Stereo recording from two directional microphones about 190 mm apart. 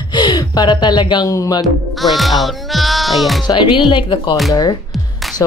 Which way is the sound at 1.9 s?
Centre (ahead or behind).